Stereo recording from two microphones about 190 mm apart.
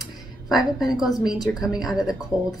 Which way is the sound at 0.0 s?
Centre (ahead or behind).